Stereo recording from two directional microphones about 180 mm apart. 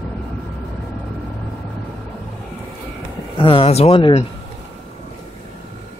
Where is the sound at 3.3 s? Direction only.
30° left (ahead or behind).